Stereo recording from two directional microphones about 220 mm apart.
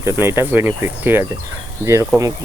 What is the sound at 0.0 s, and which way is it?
Speech, 10° right (ahead or behind).